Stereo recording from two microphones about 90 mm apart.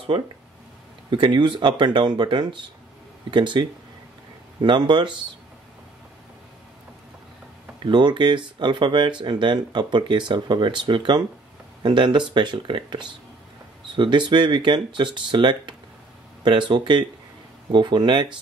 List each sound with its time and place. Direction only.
1.1 s speech: 60° right (ahead or behind)
7.8 s speech: 60° right (ahead or behind)